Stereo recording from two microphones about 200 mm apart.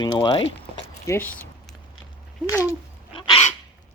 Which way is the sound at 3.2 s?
25° left (ahead or behind).